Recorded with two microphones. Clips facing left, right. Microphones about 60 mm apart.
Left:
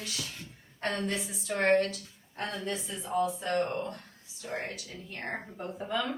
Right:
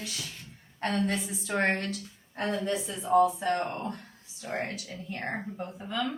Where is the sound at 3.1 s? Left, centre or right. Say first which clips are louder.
Right 7 dB; right.